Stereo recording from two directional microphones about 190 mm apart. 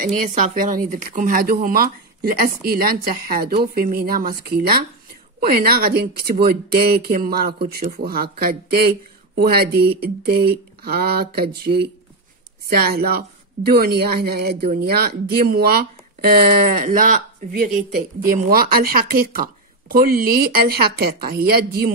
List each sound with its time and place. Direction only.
0.0 s a woman's voice: 40° right (ahead or behind)